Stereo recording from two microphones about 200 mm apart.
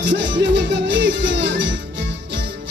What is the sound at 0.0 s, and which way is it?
Music, 65° right (ahead or behind).